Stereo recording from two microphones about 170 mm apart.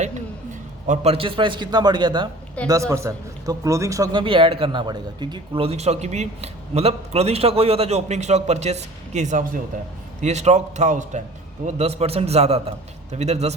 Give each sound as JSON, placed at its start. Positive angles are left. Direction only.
{"t": 0.9, "sound": "a man's voice", "side_deg": -35}